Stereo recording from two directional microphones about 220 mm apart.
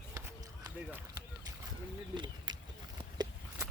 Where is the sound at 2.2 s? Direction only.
20° right (ahead or behind).